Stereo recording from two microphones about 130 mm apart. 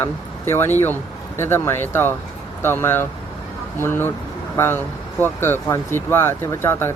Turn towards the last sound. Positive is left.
turn(degrees=15)  # may be behind; listen again after turning